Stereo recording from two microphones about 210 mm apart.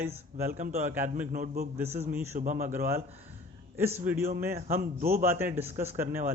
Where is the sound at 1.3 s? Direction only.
45° right (ahead or behind).